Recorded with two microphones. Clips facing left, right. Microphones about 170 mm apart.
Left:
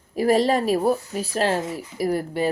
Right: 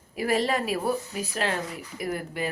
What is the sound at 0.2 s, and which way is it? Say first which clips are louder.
Speech: left 6 dB; 40° left (ahead or behind).